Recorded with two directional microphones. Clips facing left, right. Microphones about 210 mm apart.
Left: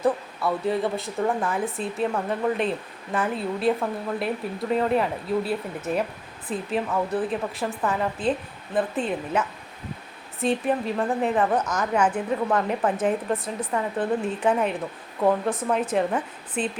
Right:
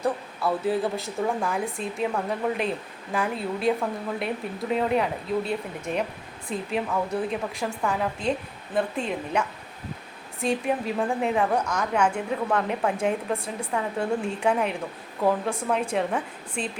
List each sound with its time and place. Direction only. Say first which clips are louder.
0.0 s a woman's voice: left 3 dB; centre (ahead or behind)
10.4 s a woman's voice: left 2 dB; centre (ahead or behind)